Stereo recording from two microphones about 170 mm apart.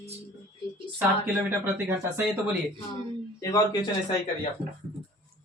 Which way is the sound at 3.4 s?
20° left (ahead or behind).